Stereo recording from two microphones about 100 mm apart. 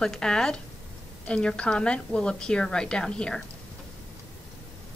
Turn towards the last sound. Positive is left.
turn(degrees=10)  # may be behind; listen again after turning